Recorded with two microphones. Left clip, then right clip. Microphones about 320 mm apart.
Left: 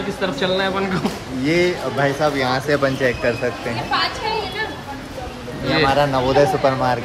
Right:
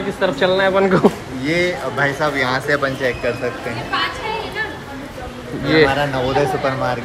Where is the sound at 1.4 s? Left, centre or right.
Left.